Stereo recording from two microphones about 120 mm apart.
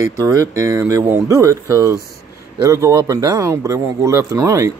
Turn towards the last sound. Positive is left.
turn(degrees=-25)  # may be behind; listen again after turning